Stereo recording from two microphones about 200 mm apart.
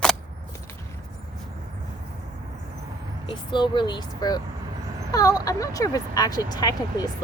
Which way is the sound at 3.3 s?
25° left (ahead or behind).